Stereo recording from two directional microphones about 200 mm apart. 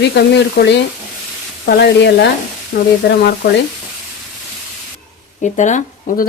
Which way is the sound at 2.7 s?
50° left (ahead or behind).